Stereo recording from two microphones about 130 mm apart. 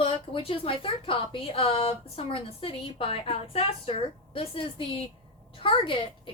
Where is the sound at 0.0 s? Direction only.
45° left (ahead or behind).